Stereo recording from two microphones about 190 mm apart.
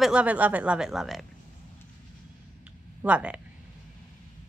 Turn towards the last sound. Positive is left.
turn(degrees=-5)  # may be behind; listen again after turning